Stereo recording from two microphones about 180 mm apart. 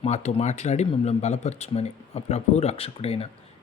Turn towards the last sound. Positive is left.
turn(degrees=35)  # may be behind; listen again after turning